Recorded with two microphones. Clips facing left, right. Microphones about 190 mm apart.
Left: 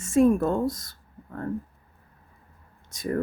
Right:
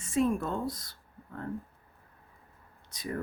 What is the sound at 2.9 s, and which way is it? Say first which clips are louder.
Speech: left 8 dB; 45° left (ahead or behind).